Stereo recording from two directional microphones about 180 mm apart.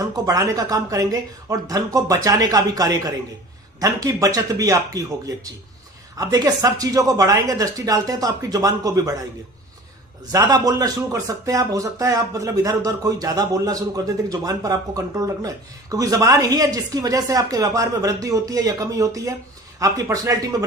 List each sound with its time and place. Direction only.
0.0 s speech: 20° right (ahead or behind)
10.3 s speech: 20° right (ahead or behind)